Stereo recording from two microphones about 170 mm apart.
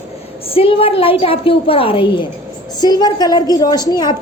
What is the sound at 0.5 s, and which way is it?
A woman's voice, 35° left (ahead or behind).